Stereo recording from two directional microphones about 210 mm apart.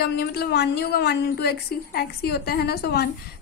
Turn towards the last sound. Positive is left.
turn(degrees=50)  # may be behind; listen again after turning